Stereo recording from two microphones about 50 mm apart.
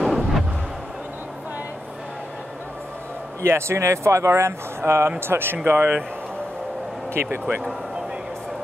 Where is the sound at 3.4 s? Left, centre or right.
Right.